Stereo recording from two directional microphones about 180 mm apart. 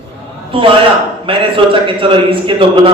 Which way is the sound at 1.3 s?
30° right (ahead or behind).